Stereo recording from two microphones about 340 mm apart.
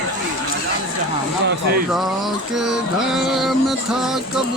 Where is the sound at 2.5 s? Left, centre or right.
Centre.